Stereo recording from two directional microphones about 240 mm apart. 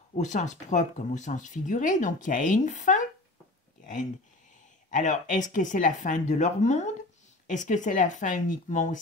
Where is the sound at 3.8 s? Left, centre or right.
Left.